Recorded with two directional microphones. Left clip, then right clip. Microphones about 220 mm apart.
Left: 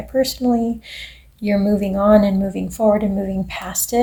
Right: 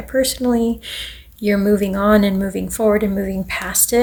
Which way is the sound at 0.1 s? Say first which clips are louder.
Right 1 dB; 35° right (ahead or behind).